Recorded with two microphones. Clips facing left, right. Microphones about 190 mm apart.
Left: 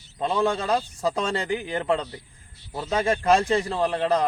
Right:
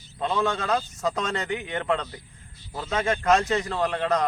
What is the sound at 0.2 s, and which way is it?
A man's voice, 30° left (ahead or behind).